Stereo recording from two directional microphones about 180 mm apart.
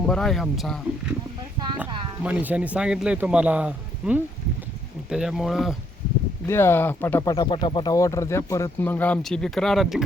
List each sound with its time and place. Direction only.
0.0 s speech: 5° left (ahead or behind)
1.5 s a sound: 25° right (ahead or behind)
2.2 s a man's voice: 10° right (ahead or behind)
6.5 s speech: 15° left (ahead or behind)